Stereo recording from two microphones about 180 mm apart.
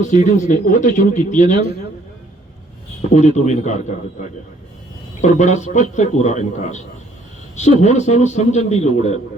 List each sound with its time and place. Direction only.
0.0 s speech: 40° left (ahead or behind)
3.1 s a man's voice: 40° left (ahead or behind)
5.2 s a man's voice: 40° left (ahead or behind)